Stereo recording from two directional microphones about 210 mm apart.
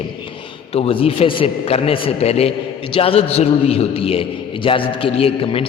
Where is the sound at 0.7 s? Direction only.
30° left (ahead or behind).